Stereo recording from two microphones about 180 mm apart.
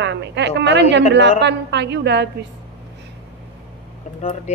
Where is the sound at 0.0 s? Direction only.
75° right (ahead or behind).